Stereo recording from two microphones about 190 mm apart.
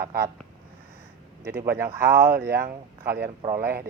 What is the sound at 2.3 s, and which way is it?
Speech, 55° right (ahead or behind).